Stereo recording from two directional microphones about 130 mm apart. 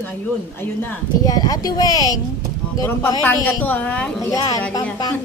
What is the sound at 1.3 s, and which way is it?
Speech, 30° left (ahead or behind).